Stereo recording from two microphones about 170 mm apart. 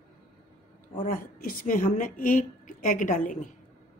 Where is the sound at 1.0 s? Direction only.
55° left (ahead or behind).